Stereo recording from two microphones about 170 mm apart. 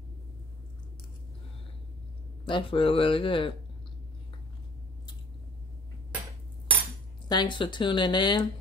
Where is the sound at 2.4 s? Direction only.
30° left (ahead or behind).